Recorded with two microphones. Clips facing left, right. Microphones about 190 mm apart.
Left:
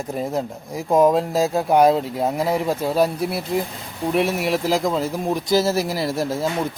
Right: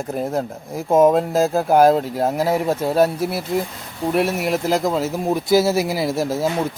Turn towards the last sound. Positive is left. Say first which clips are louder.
# right 2 dB
turn(degrees=-5)  # may be behind; listen again after turning